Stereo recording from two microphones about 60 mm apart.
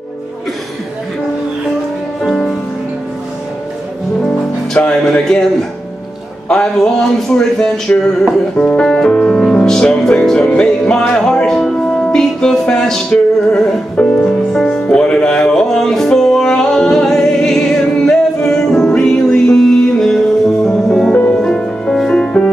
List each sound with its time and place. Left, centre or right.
2.2 s music: centre
4.7 s music: centre
6.5 s music: centre
13.9 s speech: centre
14.5 s music: centre
14.8 s music: centre
21.1 s music: centre